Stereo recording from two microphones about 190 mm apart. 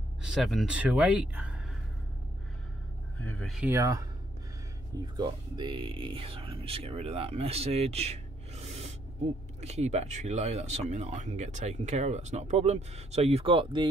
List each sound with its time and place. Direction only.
0.2 s speech: centre (ahead or behind)
3.2 s speech: 5° left (ahead or behind)
3.7 s speech: 15° right (ahead or behind)
5.0 s speech: 20° right (ahead or behind)